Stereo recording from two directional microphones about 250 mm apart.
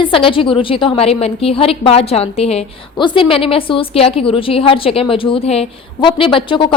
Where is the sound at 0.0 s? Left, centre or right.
Left.